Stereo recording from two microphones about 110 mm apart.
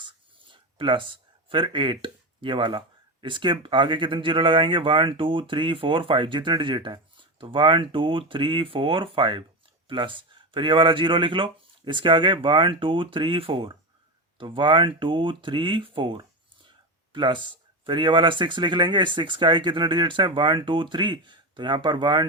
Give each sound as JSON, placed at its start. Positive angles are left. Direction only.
{"t": 0.5, "sound": "speech", "side_deg": -50}